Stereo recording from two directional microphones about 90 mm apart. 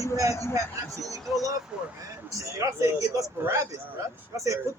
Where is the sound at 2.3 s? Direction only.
35° right (ahead or behind).